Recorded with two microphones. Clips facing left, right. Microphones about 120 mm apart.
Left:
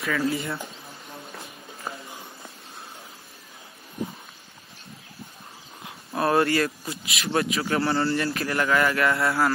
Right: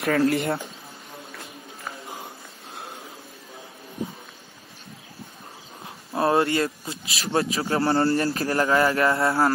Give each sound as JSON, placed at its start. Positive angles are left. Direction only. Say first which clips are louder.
{"t": 0.0, "sound": "speech", "louder": "right 5 dB", "side_deg": -65}
{"t": 5.9, "sound": "speech", "louder": "right 2 dB", "side_deg": -25}